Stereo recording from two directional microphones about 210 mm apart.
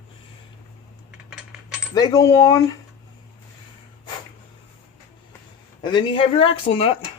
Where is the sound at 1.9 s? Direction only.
20° left (ahead or behind).